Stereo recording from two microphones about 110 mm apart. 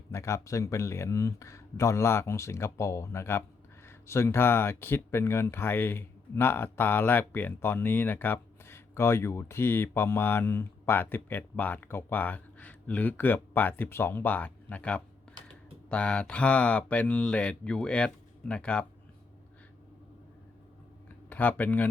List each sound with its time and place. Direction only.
0.1 s speech: 25° left (ahead or behind); by 18.9 s 10° left (ahead or behind)
21.2 s speech: 15° left (ahead or behind)